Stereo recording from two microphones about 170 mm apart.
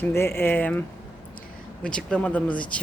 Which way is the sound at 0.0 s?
15° left (ahead or behind).